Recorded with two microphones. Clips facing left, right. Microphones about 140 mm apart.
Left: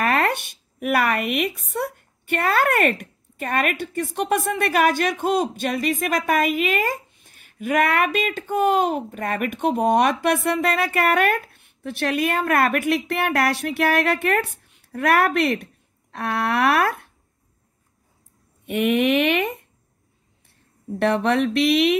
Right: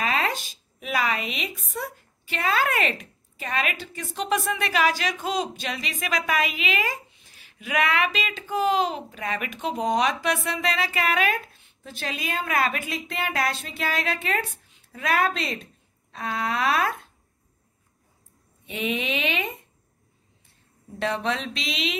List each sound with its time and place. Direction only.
0.0 s a sound: 60° left (ahead or behind)
1.6 s a woman's voice: 60° left (ahead or behind)
18.7 s speech: 65° left (ahead or behind)
21.0 s speech: 60° left (ahead or behind)